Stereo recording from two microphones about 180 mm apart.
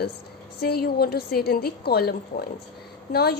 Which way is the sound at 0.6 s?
60° left (ahead or behind).